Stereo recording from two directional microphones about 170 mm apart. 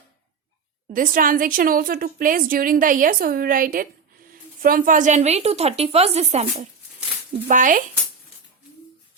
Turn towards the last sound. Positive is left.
turn(degrees=-50)  # may be behind; listen again after turning